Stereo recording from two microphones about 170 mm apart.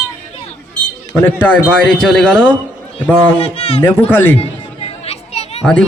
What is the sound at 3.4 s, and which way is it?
Speech, 35° left (ahead or behind).